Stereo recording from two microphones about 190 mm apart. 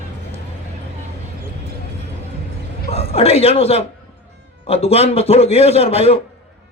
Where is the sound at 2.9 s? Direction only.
30° left (ahead or behind).